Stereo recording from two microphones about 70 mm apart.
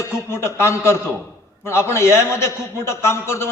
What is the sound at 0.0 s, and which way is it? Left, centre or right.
A man's voice, left.